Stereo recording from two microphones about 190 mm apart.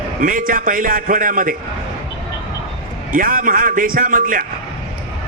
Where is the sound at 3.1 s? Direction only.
45° right (ahead or behind).